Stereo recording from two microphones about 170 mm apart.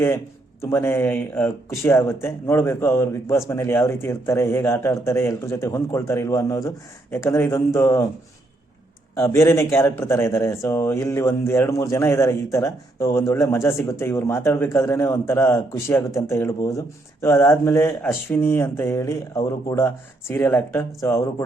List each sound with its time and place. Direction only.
0.6 s a man's voice: 15° left (ahead or behind)
9.1 s a man's voice: 15° left (ahead or behind)